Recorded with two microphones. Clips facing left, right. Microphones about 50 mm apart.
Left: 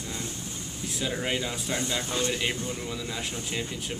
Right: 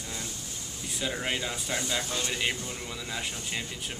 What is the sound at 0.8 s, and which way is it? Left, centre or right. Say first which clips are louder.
Speech: left 2 dB; centre.